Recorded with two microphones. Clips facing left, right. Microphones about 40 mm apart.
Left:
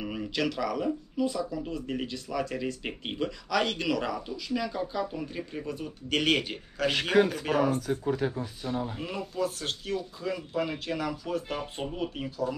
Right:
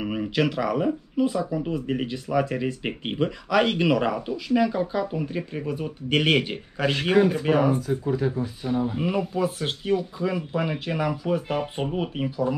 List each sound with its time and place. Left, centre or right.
0.0 s speech: right